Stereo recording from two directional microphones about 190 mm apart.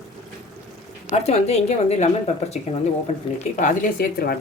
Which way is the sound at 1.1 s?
35° left (ahead or behind).